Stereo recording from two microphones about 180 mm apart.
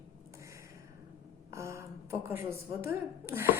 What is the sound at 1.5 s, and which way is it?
A woman's voice, 15° right (ahead or behind).